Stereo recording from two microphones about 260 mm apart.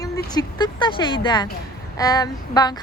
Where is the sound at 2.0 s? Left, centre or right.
Centre.